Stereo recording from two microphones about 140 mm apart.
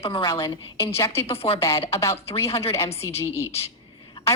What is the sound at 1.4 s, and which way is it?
Speech, 45° left (ahead or behind).